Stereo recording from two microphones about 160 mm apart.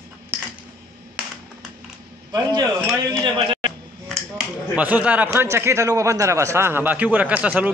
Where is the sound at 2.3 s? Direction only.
25° right (ahead or behind).